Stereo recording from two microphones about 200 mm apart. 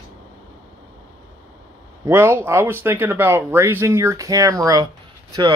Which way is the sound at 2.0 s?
15° right (ahead or behind).